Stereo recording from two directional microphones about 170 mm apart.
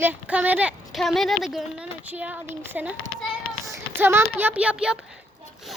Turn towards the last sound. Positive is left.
turn(degrees=-5)  # may be behind; listen again after turning